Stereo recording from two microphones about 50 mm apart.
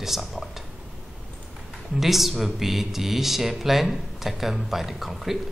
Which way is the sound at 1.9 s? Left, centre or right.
Centre.